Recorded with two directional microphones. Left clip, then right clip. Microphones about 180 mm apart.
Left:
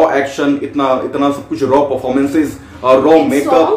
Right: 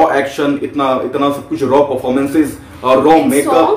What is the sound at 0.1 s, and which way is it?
Speech, 10° left (ahead or behind).